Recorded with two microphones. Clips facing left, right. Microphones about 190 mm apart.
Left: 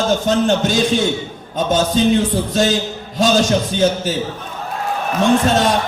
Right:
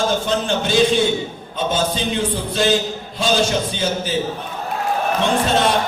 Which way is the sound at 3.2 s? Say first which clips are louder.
Left 4 dB; 45° left (ahead or behind).